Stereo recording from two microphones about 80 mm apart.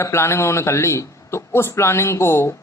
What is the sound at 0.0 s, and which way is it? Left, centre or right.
A man's voice, left.